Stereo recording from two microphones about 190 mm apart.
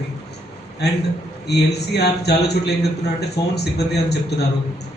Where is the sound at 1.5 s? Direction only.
60° left (ahead or behind).